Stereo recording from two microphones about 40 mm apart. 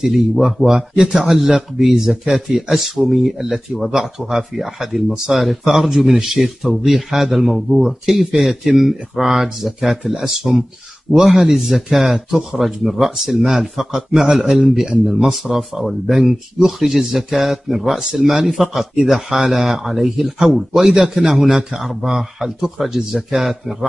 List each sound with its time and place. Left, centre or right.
0.0 s a man's voice: centre
0.7 s speech: right
1.2 s a man's voice: centre
5.4 s a man's voice: centre
15.3 s a man's voice: centre